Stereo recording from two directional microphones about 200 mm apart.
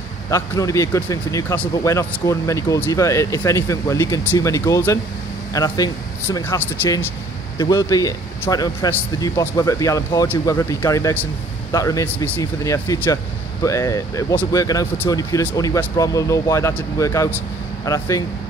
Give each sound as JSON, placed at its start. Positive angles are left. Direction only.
{"t": 0.3, "sound": "speech", "side_deg": 15}